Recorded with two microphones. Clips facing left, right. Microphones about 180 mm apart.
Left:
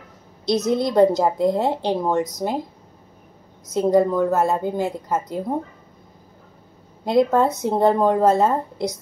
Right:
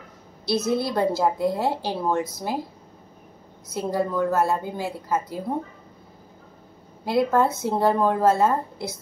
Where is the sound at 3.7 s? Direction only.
20° left (ahead or behind).